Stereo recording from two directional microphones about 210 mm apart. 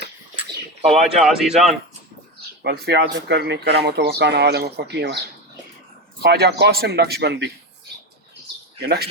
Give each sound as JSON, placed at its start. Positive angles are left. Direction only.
{"t": 0.9, "sound": "speech", "side_deg": 0}
{"t": 2.6, "sound": "speech", "side_deg": -50}
{"t": 6.2, "sound": "speech", "side_deg": -50}
{"t": 8.8, "sound": "speech", "side_deg": -50}